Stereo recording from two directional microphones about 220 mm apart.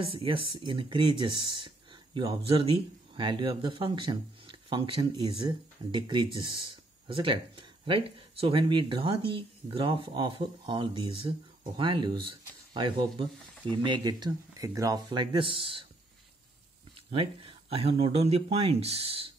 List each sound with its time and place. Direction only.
0.0 s speech: 25° right (ahead or behind)
17.1 s speech: 25° right (ahead or behind)